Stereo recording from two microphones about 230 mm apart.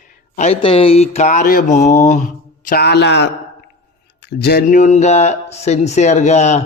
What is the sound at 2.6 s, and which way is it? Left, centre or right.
Speech, left.